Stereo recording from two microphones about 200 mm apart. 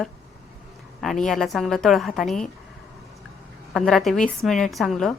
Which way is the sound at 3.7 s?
Centre (ahead or behind).